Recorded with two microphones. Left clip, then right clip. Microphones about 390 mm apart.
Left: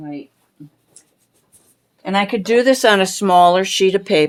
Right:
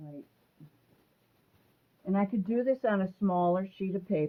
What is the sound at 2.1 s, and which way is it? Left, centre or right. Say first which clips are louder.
Speech: left 16 dB; left.